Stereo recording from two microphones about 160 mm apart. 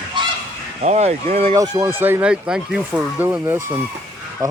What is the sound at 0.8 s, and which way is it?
Speech, 45° right (ahead or behind).